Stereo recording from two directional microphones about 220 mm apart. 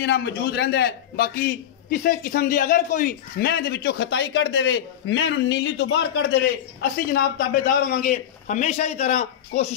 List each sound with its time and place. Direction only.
0.0 s a man's voice: 50° left (ahead or behind); by 9.7 s 30° left (ahead or behind)